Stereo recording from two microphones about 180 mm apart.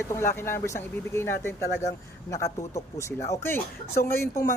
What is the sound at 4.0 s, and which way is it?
Speech, 15° left (ahead or behind).